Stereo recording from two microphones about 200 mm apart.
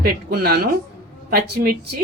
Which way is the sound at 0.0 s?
50° right (ahead or behind).